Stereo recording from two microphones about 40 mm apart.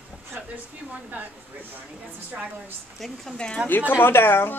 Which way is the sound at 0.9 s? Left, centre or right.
Right.